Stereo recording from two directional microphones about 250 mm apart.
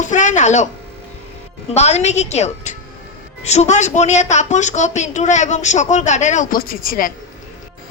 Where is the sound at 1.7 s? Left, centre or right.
Left.